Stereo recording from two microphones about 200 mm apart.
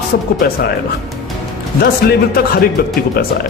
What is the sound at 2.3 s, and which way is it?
Speech, 50° left (ahead or behind).